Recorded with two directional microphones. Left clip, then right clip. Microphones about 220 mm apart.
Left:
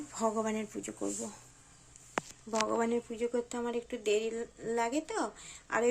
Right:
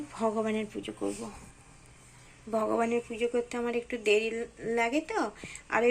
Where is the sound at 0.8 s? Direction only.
25° left (ahead or behind).